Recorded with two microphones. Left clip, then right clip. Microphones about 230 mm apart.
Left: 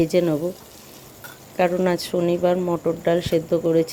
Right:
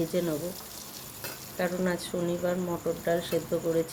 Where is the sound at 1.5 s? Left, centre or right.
Left.